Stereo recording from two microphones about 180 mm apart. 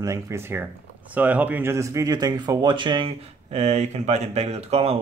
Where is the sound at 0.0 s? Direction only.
15° right (ahead or behind).